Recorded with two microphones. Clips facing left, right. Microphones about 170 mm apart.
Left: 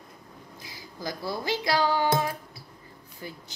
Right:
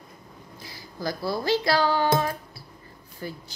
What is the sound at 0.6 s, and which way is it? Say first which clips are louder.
Speech: right 4 dB; 15° left (ahead or behind).